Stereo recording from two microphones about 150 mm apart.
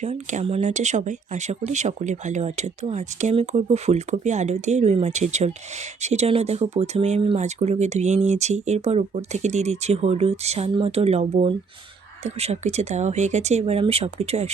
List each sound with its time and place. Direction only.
0.0 s speech: 50° right (ahead or behind)